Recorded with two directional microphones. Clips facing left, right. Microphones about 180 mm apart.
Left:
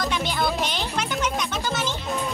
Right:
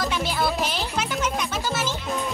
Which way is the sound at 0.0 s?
5° right (ahead or behind).